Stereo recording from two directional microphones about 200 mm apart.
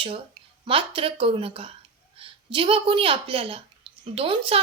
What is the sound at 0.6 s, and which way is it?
A woman's voice, 25° right (ahead or behind).